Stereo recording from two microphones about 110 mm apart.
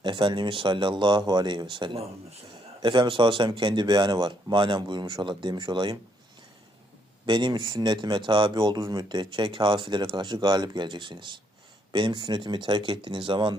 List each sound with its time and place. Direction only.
0.0 s speech: 45° right (ahead or behind)
7.3 s speech: 45° right (ahead or behind)